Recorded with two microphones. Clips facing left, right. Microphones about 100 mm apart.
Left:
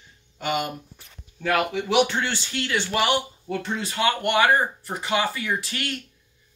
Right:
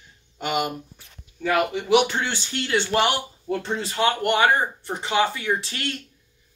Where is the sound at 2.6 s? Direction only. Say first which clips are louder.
Right 3 dB; 30° right (ahead or behind).